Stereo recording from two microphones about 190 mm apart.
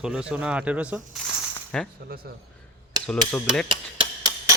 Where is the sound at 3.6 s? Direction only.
25° right (ahead or behind).